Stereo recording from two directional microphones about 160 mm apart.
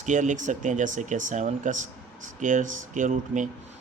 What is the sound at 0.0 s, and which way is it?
Speech, 50° right (ahead or behind).